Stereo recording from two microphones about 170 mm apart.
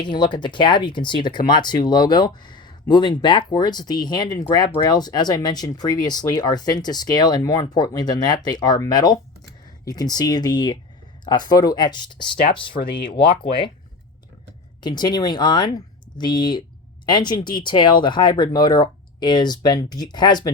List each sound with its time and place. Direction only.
0.0 s speech: 25° left (ahead or behind)
12.7 s speech: 60° left (ahead or behind)
14.8 s speech: 25° left (ahead or behind)